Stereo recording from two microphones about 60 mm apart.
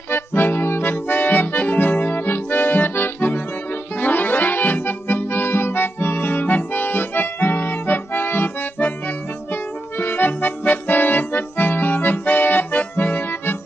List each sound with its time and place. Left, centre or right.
0.1 s accordion: left
9.9 s accordion: left